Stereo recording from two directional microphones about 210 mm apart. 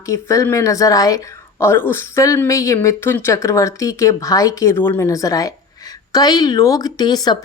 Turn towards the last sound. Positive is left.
turn(degrees=20)  # may be behind; listen again after turning